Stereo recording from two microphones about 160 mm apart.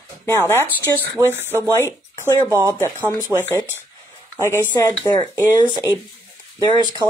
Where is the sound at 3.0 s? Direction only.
25° left (ahead or behind).